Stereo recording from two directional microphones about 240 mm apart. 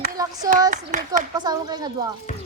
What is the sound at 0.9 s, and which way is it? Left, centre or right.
Speech, right.